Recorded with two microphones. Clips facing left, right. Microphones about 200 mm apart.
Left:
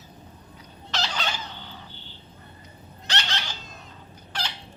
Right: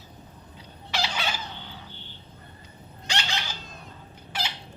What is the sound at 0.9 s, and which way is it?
Chicken, 10° right (ahead or behind).